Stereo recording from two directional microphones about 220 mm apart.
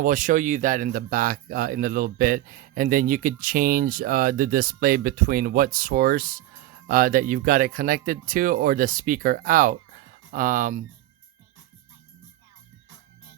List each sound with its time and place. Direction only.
0.0 s speech: 35° right (ahead or behind)